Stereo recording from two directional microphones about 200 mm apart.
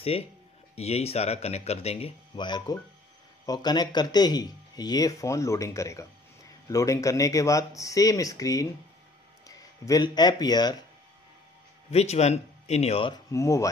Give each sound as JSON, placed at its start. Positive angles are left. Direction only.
{"t": 0.7, "sound": "speech", "side_deg": 30}
{"t": 11.9, "sound": "speech", "side_deg": 30}